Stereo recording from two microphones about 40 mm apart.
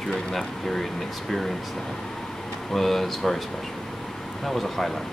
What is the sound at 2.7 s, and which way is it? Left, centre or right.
Speech, centre.